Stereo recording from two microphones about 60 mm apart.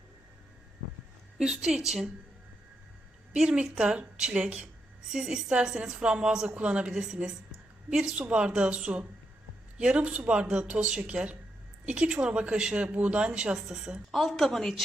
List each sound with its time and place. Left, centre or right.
1.4 s a woman's voice: centre
3.3 s a woman's voice: centre